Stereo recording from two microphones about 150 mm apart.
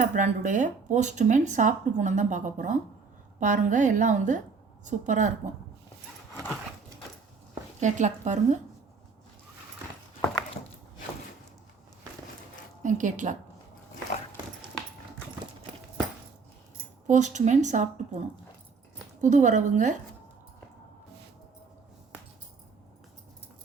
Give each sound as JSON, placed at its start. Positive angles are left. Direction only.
{"t": 0.0, "sound": "speech", "side_deg": -55}
{"t": 7.8, "sound": "a woman's voice", "side_deg": -55}
{"t": 12.8, "sound": "speech", "side_deg": -60}
{"t": 17.1, "sound": "a woman's voice", "side_deg": -50}
{"t": 19.2, "sound": "a woman's voice", "side_deg": -55}